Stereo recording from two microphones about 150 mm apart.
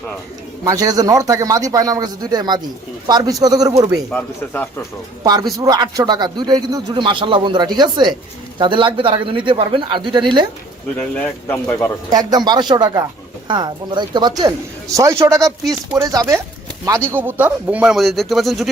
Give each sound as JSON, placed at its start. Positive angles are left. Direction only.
{"t": 0.6, "sound": "speech", "side_deg": -20}
{"t": 4.5, "sound": "speech", "side_deg": 15}
{"t": 5.2, "sound": "speech", "side_deg": -25}
{"t": 10.9, "sound": "speech", "side_deg": 10}
{"t": 12.5, "sound": "speech", "side_deg": -30}